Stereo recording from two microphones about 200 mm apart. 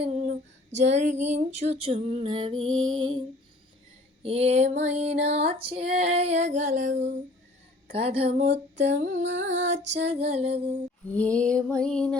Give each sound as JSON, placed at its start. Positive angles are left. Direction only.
{"t": 0.0, "sound": "female singing", "side_deg": -35}
{"t": 1.7, "sound": "music", "side_deg": -30}
{"t": 2.5, "sound": "music", "side_deg": -90}
{"t": 4.2, "sound": "music", "side_deg": -30}
{"t": 9.1, "sound": "music", "side_deg": -65}
{"t": 10.0, "sound": "music", "side_deg": -30}
{"t": 11.1, "sound": "a sound", "side_deg": 5}
{"t": 11.8, "sound": "music", "side_deg": 5}